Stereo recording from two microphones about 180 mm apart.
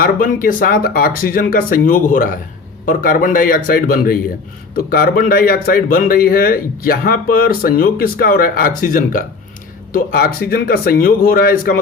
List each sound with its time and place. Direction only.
0.0 s speech: 50° left (ahead or behind)